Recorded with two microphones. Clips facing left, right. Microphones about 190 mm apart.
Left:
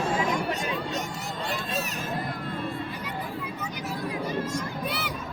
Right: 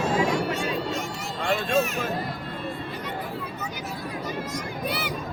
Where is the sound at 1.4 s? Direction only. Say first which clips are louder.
Right 9 dB; 65° right (ahead or behind).